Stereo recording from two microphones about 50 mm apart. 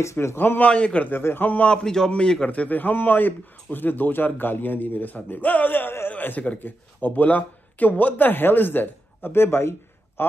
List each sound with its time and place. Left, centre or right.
0.0 s a man's voice: left
0.4 s a man's voice: left
0.7 s a man's voice: left
1.1 s a man's voice: left
1.7 s a man's voice: centre
2.4 s a man's voice: left